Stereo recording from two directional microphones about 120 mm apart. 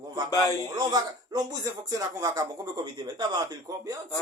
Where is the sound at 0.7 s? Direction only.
35° right (ahead or behind).